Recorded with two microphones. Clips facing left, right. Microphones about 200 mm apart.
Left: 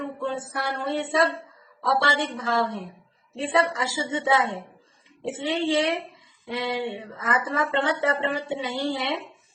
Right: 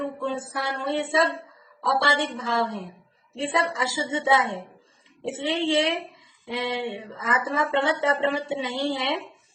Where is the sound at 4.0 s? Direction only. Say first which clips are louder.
Even; 25° right (ahead or behind).